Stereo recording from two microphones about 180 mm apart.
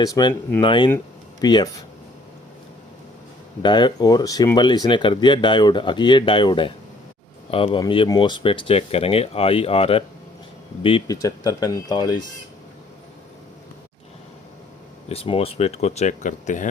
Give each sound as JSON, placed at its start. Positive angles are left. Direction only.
{"t": 0.0, "sound": "speech", "side_deg": 20}
{"t": 3.6, "sound": "speech", "side_deg": 25}
{"t": 15.1, "sound": "speech", "side_deg": 35}